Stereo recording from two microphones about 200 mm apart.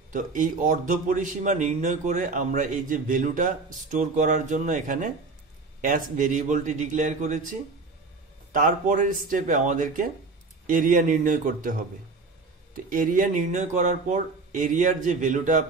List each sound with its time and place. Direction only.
0.1 s a man's voice: 40° right (ahead or behind)
12.7 s a man's voice: 45° right (ahead or behind)